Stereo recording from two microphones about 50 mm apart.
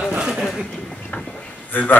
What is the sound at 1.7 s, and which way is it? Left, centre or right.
Speech, left.